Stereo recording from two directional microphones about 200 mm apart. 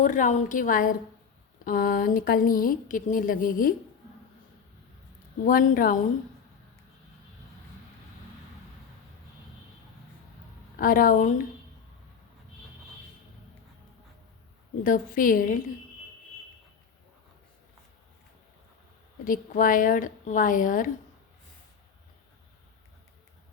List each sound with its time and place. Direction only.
0.0 s a woman's voice: 40° left (ahead or behind)
5.5 s a woman's voice: 45° left (ahead or behind)
10.8 s a woman's voice: 45° left (ahead or behind)
14.8 s a woman's voice: 40° left (ahead or behind)
19.2 s a woman's voice: 45° left (ahead or behind)